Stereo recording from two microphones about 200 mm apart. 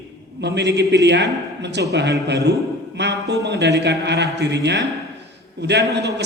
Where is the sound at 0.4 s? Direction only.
60° right (ahead or behind).